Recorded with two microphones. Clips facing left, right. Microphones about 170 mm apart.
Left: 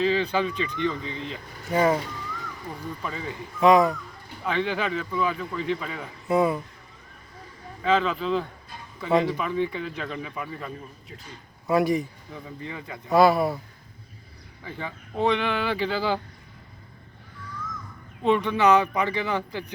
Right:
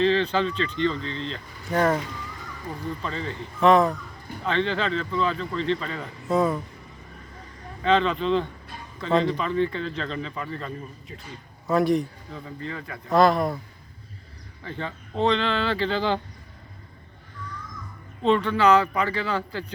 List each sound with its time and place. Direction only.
0.0 s a man's voice: 10° left (ahead or behind)
3.0 s a man's voice: 10° left (ahead or behind)
7.8 s a man's voice: 5° left (ahead or behind)
12.3 s a man's voice: 15° left (ahead or behind)
13.1 s a man's voice: 5° left (ahead or behind)
14.6 s a man's voice: 10° left (ahead or behind)
18.2 s a man's voice: 15° left (ahead or behind)